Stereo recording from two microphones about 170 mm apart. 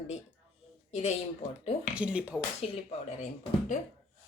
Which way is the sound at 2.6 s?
35° left (ahead or behind).